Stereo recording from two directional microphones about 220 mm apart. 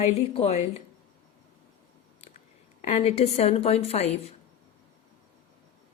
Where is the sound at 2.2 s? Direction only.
30° left (ahead or behind).